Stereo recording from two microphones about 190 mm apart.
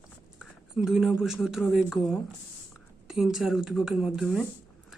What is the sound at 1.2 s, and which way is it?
Speech, centre (ahead or behind).